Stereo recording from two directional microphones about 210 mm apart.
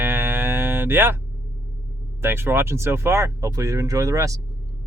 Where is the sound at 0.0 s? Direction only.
10° right (ahead or behind).